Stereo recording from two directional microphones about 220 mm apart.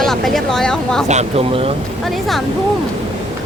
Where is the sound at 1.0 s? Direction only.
30° right (ahead or behind).